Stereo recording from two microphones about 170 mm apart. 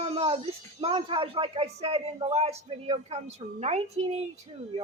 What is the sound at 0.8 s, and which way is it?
A man's voice, 30° right (ahead or behind).